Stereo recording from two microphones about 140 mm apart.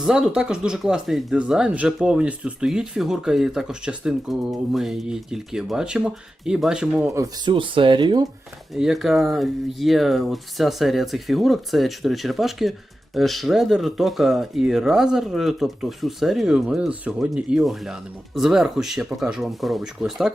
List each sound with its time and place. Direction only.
0.0 s speech: 5° right (ahead or behind)
7.1 s speech: 25° right (ahead or behind)
7.5 s speech: 35° right (ahead or behind)
8.7 s speech: centre (ahead or behind)